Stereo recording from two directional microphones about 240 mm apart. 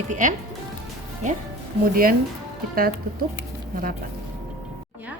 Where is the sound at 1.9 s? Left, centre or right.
Right.